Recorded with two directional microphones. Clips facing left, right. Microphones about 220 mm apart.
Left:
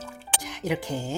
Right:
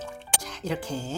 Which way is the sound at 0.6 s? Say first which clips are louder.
Left 2 dB; 15° left (ahead or behind).